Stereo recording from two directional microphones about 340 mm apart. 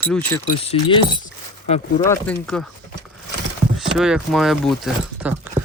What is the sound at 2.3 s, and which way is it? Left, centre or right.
Speech, centre.